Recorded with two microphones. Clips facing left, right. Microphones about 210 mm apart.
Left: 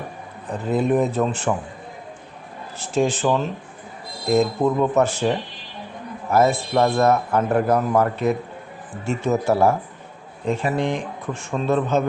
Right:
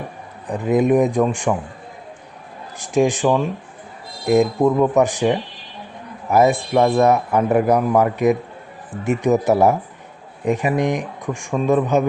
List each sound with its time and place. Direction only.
0.4 s a man's voice: 15° right (ahead or behind)
2.7 s a man's voice: 15° right (ahead or behind)